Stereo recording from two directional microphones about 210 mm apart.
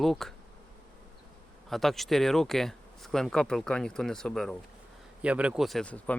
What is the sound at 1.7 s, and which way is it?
Speech, centre (ahead or behind).